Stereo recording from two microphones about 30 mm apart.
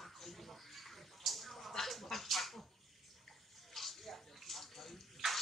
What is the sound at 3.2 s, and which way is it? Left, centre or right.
Bathtub, centre.